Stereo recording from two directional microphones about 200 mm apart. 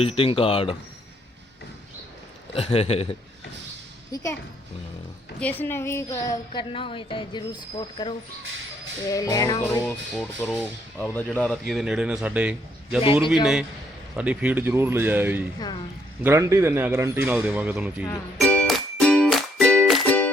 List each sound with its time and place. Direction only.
0.0 s a woman's voice: 30° left (ahead or behind)
2.7 s a woman's voice: 30° left (ahead or behind)
4.1 s music: 15° left (ahead or behind)
5.4 s a woman's voice: 10° left (ahead or behind)
9.0 s music: 15° left (ahead or behind)
9.7 s speech: 10° left (ahead or behind)
18.0 s music: 10° left (ahead or behind)